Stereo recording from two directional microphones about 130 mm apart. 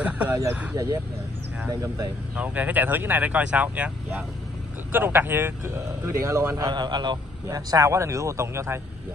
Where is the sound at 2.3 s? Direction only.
10° right (ahead or behind); by 7.2 s 35° right (ahead or behind).